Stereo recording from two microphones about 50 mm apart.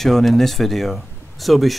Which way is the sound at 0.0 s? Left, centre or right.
Centre.